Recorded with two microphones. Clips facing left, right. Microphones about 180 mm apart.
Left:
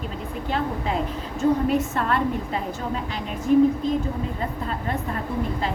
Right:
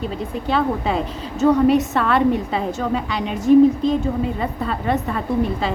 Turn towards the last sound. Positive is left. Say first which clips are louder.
# right 6 dB
turn(degrees=-85)